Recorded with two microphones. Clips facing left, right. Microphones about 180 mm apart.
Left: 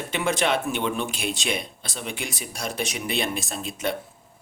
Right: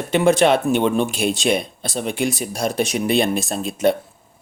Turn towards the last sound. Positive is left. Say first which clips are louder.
# right 10 dB
turn(degrees=-45)  # may be behind; listen again after turning